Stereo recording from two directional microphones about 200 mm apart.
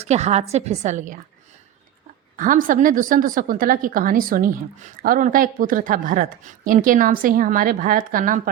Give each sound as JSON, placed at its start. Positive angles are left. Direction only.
{"t": 0.0, "sound": "a woman's voice", "side_deg": -35}
{"t": 2.3, "sound": "a woman's voice", "side_deg": -40}